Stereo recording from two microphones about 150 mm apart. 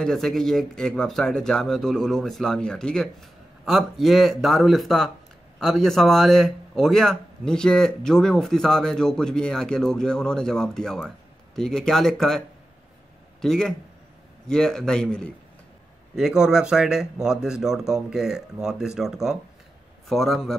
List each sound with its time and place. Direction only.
0.0 s a man's voice: 5° left (ahead or behind)